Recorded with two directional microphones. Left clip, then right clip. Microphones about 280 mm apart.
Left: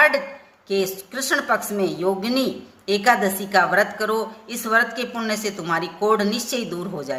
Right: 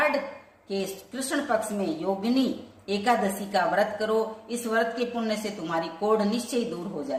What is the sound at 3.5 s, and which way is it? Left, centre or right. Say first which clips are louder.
Speech: left 6 dB; left.